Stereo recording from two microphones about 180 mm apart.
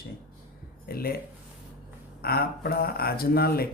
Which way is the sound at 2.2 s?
60° left (ahead or behind).